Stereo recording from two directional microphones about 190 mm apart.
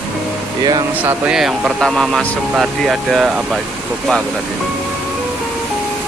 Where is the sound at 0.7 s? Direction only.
20° right (ahead or behind).